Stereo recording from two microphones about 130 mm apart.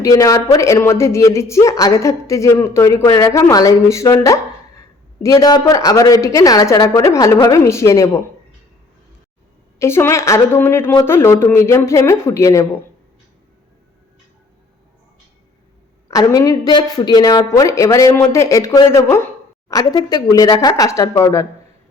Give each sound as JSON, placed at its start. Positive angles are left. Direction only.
{"t": 0.0, "sound": "a man's voice", "side_deg": 25}
{"t": 9.7, "sound": "a man's voice", "side_deg": 20}
{"t": 16.0, "sound": "a man's voice", "side_deg": 25}